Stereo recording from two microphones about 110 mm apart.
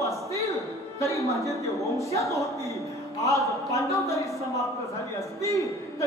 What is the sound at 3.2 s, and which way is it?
A man's voice, 30° left (ahead or behind).